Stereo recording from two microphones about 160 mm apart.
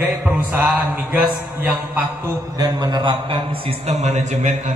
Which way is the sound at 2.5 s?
25° right (ahead or behind).